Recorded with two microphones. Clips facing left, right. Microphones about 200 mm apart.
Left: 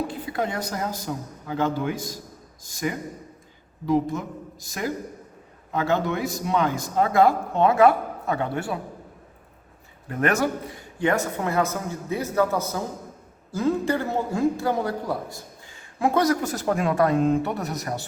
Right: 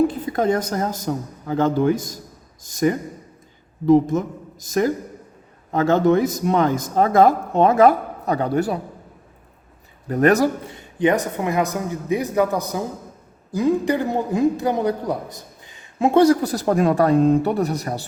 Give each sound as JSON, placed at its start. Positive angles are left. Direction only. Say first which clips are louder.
{"t": 0.1, "sound": "a woman's voice", "louder": "right 8 dB", "side_deg": -45}
{"t": 4.8, "sound": "a woman's voice", "louder": "right 9 dB", "side_deg": -45}
{"t": 10.1, "sound": "a man's voice", "louder": "right 7 dB", "side_deg": -35}